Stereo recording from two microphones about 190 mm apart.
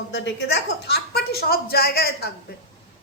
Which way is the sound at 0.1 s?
65° left (ahead or behind).